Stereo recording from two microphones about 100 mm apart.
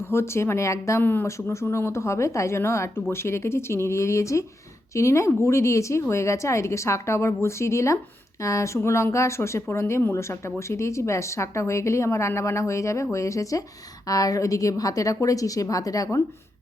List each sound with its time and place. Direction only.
0.1 s speech: 25° left (ahead or behind)